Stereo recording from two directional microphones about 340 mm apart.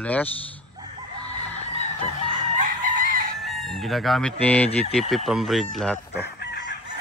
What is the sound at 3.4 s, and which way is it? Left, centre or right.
Speech, centre.